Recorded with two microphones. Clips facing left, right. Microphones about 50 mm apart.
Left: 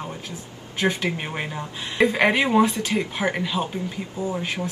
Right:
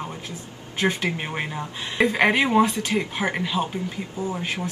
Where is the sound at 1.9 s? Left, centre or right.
Centre.